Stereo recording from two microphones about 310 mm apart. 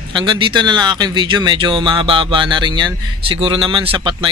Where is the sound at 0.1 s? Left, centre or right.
Centre.